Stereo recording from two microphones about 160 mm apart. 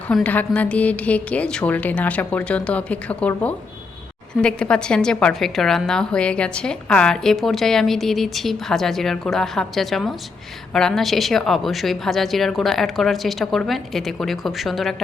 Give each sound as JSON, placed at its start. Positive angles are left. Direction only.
{"t": 0.1, "sound": "a woman's voice", "side_deg": 10}